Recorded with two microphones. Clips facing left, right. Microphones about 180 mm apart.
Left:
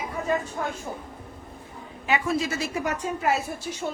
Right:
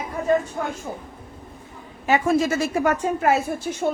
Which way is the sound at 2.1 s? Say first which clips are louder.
Right 6 dB; 45° right (ahead or behind).